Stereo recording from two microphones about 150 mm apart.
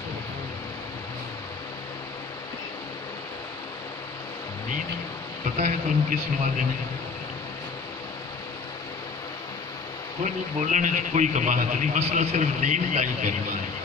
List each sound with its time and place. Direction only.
5.6 s a man's voice: 55° right (ahead or behind)
10.2 s a man's voice: 55° right (ahead or behind)